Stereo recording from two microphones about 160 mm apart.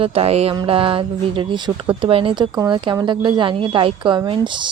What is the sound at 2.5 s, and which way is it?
A woman's voice, 20° right (ahead or behind).